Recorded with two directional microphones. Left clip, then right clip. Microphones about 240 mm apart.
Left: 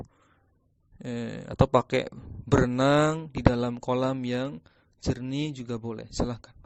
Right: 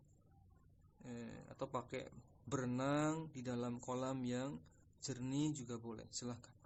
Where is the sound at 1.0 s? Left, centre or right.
Left.